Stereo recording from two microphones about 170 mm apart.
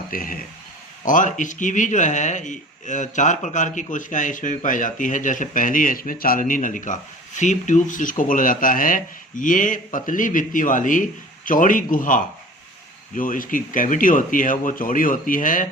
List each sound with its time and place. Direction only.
0.1 s a man's voice: 55° left (ahead or behind)